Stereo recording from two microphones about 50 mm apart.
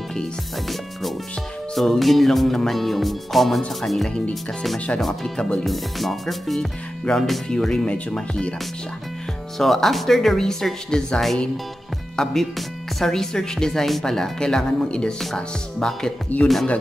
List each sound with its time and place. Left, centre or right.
1.8 s music: centre
4.1 s speech: centre
4.7 s speech: left
5.0 s speech: centre
5.7 s music: centre
7.1 s speech: centre
9.6 s speech: centre
16.3 s speech: left